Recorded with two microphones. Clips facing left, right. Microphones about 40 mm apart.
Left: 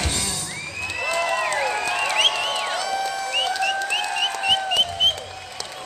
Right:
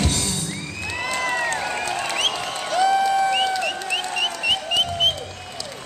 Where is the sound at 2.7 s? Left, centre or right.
Centre.